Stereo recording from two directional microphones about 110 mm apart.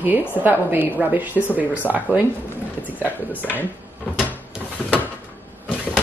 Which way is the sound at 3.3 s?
15° left (ahead or behind).